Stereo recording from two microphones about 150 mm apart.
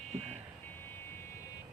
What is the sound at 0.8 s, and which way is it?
Vehicle, 15° left (ahead or behind).